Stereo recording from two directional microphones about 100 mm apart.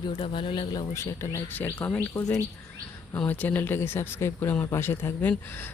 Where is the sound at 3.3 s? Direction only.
20° left (ahead or behind).